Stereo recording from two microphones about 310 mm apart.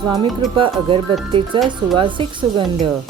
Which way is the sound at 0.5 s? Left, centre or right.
Centre.